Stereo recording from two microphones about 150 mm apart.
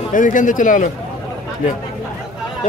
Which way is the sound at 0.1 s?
60° left (ahead or behind).